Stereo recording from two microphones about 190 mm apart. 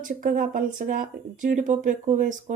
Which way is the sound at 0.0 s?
45° right (ahead or behind).